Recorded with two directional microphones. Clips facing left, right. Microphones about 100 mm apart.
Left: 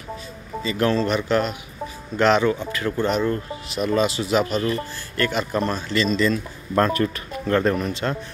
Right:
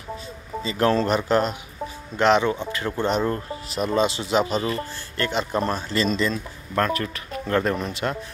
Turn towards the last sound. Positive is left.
turn(degrees=-20)  # may be behind; listen again after turning